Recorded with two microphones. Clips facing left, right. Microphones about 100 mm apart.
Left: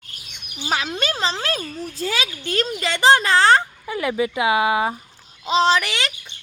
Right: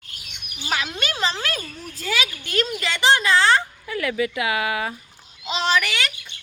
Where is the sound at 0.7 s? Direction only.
35° left (ahead or behind).